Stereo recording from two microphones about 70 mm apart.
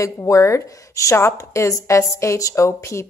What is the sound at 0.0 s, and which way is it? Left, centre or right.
A woman's voice, left.